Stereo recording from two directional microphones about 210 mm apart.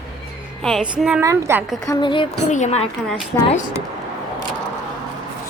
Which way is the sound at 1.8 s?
20° left (ahead or behind).